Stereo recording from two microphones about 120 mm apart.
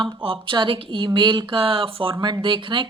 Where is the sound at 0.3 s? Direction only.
45° right (ahead or behind).